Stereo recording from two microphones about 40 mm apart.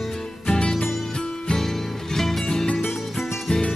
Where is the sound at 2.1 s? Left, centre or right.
Centre.